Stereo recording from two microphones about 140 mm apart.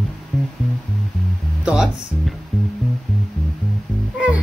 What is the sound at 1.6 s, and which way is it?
Music, 5° right (ahead or behind).